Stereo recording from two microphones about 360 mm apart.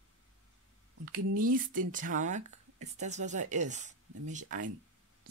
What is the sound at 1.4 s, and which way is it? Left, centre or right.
Speech, right.